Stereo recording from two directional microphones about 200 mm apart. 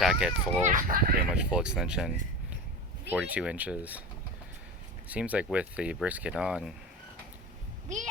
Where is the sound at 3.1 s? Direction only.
5° right (ahead or behind).